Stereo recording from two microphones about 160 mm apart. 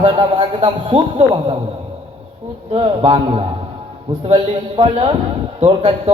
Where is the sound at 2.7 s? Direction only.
35° right (ahead or behind).